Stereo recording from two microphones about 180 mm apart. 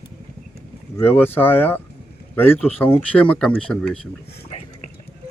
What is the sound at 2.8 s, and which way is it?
Speech, 10° left (ahead or behind).